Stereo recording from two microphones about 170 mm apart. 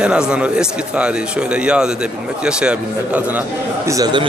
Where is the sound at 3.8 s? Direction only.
20° right (ahead or behind).